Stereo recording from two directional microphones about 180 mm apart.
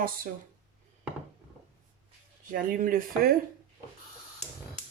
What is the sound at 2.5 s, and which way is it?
Speech, 50° right (ahead or behind).